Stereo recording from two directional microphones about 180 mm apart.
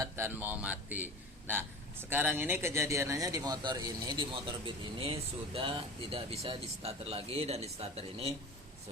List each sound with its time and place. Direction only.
0.0 s speech: 10° right (ahead or behind); by 8.3 s 35° right (ahead or behind)